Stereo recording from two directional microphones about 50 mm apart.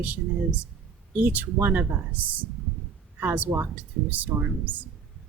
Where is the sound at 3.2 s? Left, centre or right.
Right.